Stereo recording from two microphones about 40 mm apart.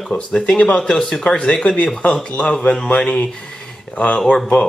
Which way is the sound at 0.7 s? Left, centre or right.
Left.